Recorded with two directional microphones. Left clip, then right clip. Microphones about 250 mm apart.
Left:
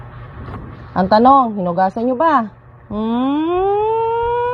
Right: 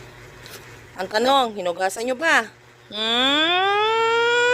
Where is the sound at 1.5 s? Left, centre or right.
Right.